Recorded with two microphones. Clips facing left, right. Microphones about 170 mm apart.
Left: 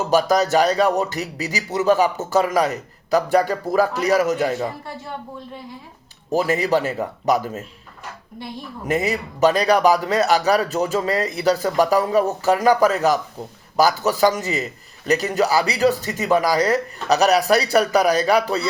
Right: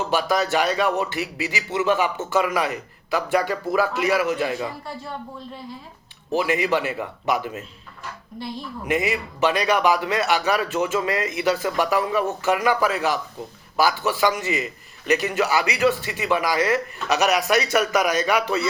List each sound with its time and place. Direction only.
0.1 s a man's voice: 40° left (ahead or behind)
6.3 s a man's voice: 40° left (ahead or behind)
8.9 s a man's voice: 40° left (ahead or behind)